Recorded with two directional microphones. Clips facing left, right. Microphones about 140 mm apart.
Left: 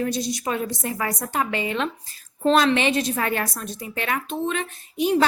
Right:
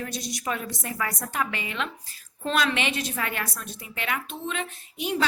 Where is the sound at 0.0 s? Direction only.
30° left (ahead or behind).